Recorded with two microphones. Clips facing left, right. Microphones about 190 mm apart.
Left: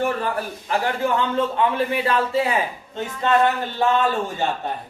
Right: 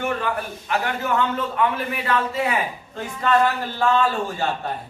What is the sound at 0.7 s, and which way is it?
A man's voice, 30° left (ahead or behind).